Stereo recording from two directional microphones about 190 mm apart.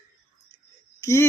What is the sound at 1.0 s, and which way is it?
Speech, 15° left (ahead or behind).